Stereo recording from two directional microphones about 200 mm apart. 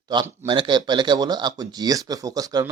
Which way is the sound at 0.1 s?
25° right (ahead or behind).